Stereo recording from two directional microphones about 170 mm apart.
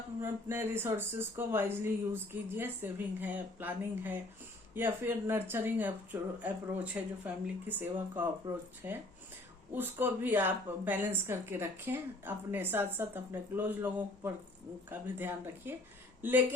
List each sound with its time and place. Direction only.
0.2 s speech: 15° right (ahead or behind)
8.4 s speech: 25° right (ahead or behind)
8.8 s speech: 10° right (ahead or behind)